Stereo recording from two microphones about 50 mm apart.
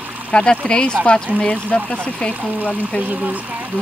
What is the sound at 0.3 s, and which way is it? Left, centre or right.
Speech, centre.